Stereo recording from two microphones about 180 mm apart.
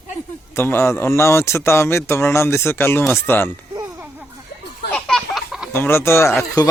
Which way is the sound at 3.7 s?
15° right (ahead or behind).